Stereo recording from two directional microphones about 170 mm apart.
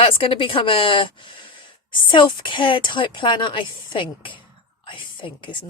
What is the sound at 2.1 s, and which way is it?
A woman's voice, 30° left (ahead or behind).